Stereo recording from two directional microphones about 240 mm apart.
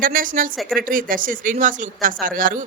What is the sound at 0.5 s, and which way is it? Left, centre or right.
Speech, centre.